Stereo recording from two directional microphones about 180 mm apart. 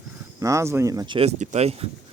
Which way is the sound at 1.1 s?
40° right (ahead or behind).